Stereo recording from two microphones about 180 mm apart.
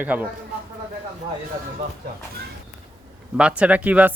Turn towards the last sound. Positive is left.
turn(degrees=-10)  # may be behind; listen again after turning